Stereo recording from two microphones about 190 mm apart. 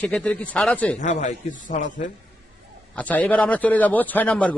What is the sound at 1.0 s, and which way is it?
A man's voice, 40° left (ahead or behind).